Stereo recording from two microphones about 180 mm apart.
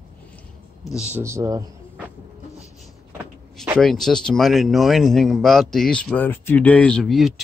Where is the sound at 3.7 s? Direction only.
Centre (ahead or behind).